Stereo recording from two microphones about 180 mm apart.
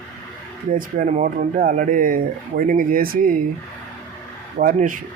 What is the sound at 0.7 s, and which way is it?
Speech, 50° right (ahead or behind).